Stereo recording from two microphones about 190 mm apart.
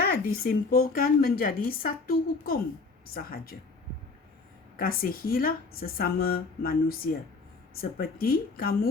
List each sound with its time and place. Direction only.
0.0 s speech: 50° left (ahead or behind)
4.8 s speech: 50° left (ahead or behind)